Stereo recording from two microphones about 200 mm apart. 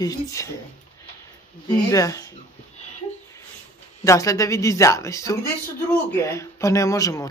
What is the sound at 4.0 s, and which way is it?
Speech, 15° left (ahead or behind).